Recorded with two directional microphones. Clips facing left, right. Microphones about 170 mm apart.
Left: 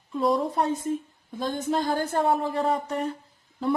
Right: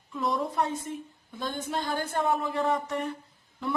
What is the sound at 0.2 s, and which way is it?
A woman's voice, 30° left (ahead or behind).